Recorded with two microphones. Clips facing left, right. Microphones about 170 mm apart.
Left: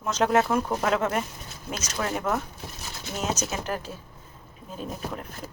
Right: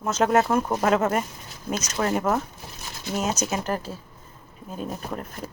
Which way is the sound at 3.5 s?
40° right (ahead or behind).